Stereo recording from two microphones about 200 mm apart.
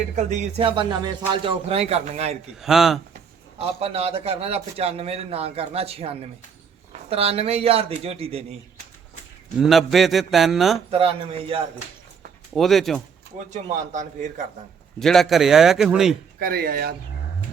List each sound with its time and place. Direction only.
0.3 s a man's voice: 35° right (ahead or behind)
2.6 s a man's voice: centre (ahead or behind)
3.6 s a man's voice: 30° right (ahead or behind)
9.6 s a man's voice: centre (ahead or behind)
10.9 s a man's voice: 30° right (ahead or behind)
12.5 s a man's voice: centre (ahead or behind)
13.5 s a man's voice: 40° right (ahead or behind)
14.9 s a man's voice: centre (ahead or behind)
16.4 s speech: 50° right (ahead or behind)